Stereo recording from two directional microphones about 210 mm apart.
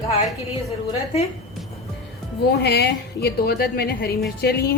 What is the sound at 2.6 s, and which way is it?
A woman's voice, 50° left (ahead or behind).